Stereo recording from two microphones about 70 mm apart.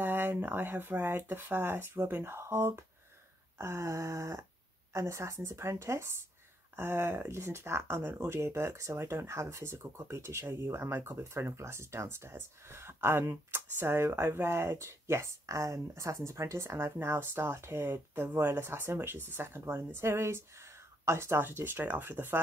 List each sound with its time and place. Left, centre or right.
0.0 s a woman's voice: right